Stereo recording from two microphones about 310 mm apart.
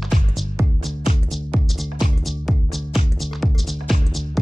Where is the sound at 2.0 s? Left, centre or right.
Centre.